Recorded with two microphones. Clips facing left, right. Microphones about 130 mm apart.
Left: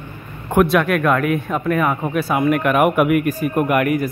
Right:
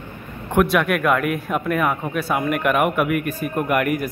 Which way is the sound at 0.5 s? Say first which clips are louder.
Left 3 dB; centre (ahead or behind).